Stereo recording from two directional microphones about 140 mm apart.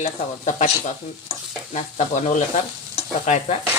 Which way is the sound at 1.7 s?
55° left (ahead or behind).